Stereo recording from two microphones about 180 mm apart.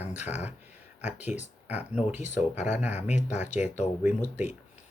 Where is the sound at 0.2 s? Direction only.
40° left (ahead or behind).